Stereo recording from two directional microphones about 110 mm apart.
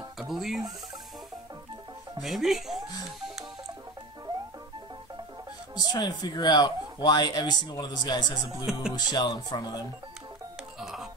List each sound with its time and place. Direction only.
0.2 s speech: centre (ahead or behind)
2.2 s speech: centre (ahead or behind)
5.9 s speech: 40° left (ahead or behind)
10.8 s music: 5° right (ahead or behind)